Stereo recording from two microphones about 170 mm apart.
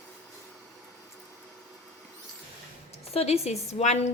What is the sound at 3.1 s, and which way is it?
Speech, 40° left (ahead or behind).